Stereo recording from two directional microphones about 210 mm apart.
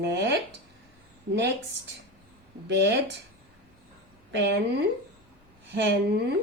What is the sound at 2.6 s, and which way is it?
Speech, 55° right (ahead or behind).